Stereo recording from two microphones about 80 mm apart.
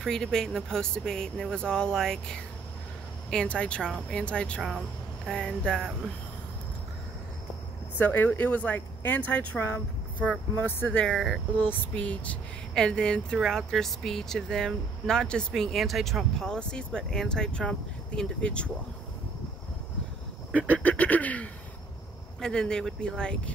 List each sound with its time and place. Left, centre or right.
0.0 s speech: centre
4.6 s speech: centre
8.0 s speech: left
10.9 s speech: centre
11.1 s speech: centre
11.5 s speech: centre
20.7 s speech: centre